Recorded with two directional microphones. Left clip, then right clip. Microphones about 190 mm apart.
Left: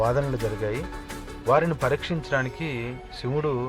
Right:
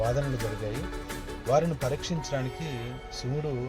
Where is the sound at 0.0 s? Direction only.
Centre (ahead or behind).